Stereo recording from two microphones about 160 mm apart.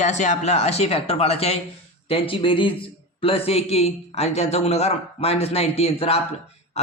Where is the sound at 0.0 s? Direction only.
45° left (ahead or behind).